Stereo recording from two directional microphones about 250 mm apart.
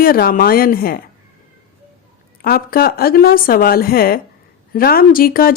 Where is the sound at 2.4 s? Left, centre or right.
Left.